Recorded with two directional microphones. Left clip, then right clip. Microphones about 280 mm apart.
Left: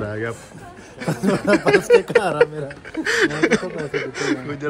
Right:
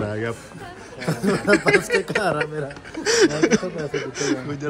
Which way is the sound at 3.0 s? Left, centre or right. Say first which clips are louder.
Right 1 dB; centre.